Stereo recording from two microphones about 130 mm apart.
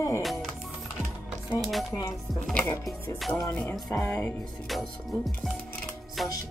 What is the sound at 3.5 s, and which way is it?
Music, 15° left (ahead or behind).